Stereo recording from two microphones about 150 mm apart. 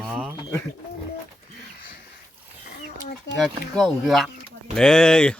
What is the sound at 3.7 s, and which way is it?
Speech, centre (ahead or behind).